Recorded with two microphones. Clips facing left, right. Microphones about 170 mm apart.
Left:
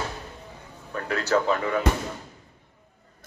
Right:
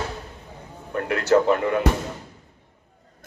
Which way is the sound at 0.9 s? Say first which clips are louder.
Right 5 dB; 20° right (ahead or behind).